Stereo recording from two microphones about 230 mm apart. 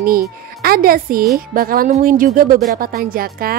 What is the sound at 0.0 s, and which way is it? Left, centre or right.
Speech, right.